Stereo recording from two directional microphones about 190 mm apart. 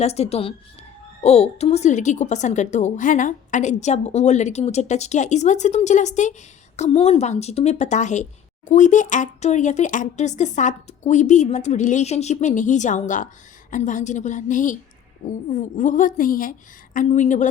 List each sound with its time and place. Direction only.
0.0 s a woman's voice: 35° left (ahead or behind)